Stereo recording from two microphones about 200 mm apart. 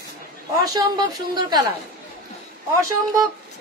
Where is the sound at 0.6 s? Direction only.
20° right (ahead or behind).